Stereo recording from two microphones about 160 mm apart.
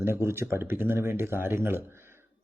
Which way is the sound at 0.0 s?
15° right (ahead or behind).